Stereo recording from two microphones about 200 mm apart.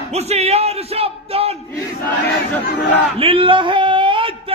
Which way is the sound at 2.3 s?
50° left (ahead or behind).